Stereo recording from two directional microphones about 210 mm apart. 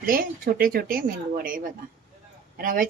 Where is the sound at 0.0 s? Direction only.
40° right (ahead or behind).